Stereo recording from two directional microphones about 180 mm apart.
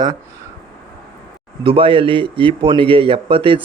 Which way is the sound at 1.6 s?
30° right (ahead or behind).